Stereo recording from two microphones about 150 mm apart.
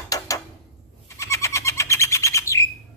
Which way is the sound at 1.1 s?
20° left (ahead or behind).